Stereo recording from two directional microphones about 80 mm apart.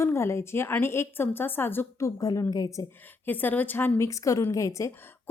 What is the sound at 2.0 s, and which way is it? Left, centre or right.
Speech, left.